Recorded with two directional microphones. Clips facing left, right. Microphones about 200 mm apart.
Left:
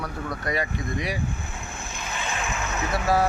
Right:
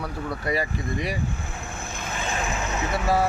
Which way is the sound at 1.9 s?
50° right (ahead or behind).